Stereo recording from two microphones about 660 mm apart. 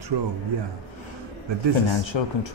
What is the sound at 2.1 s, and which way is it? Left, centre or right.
Speech, left.